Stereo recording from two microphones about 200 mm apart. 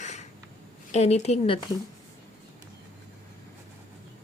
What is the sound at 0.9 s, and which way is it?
Speech, 35° left (ahead or behind).